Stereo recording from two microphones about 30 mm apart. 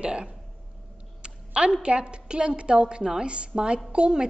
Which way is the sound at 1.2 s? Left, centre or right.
Right.